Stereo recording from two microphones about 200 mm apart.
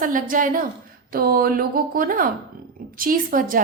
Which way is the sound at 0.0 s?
45° right (ahead or behind).